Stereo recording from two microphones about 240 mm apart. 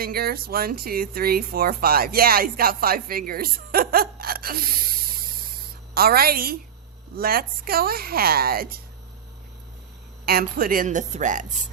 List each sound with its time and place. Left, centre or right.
0.0 s speech: right
5.9 s speech: right
10.2 s speech: right